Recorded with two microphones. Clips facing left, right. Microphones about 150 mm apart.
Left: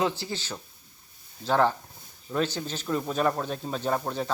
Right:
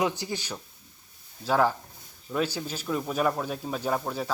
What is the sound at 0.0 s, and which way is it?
A man's voice, 15° right (ahead or behind).